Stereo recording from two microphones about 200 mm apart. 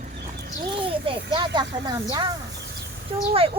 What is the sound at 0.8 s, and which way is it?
Speech, 25° right (ahead or behind).